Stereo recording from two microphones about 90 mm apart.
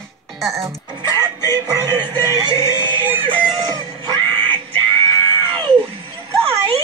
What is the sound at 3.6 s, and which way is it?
Screaming, 45° right (ahead or behind).